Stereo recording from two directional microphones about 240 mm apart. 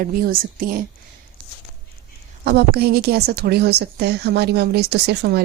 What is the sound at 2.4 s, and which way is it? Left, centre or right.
A woman's voice, right.